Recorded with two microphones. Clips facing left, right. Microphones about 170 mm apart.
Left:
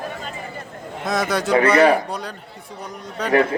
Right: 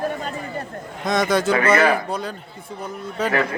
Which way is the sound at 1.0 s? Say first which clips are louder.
Right 3 dB; centre (ahead or behind).